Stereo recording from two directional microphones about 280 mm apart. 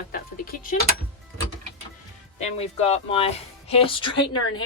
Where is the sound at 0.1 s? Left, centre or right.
Left.